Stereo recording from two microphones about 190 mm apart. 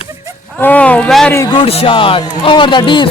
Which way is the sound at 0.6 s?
10° left (ahead or behind).